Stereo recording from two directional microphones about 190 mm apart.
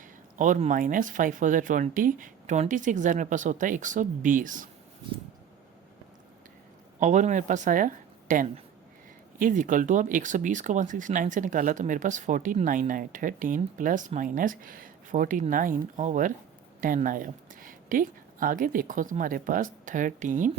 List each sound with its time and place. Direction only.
0.3 s speech: 40° right (ahead or behind)
7.0 s speech: 40° right (ahead or behind)